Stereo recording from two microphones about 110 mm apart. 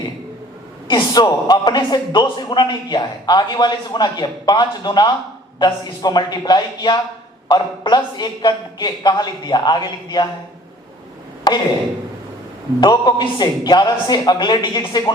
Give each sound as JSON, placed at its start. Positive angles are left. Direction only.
{"t": 0.9, "sound": "a man's voice", "side_deg": 40}
{"t": 11.5, "sound": "a sound", "side_deg": 40}
{"t": 12.8, "sound": "a man's voice", "side_deg": 40}